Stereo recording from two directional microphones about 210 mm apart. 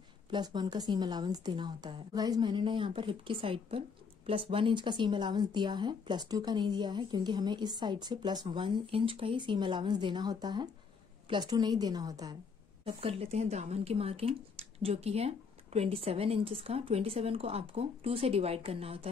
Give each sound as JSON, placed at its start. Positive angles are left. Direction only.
{"t": 0.3, "sound": "speech", "side_deg": -20}
{"t": 12.8, "sound": "speech", "side_deg": -30}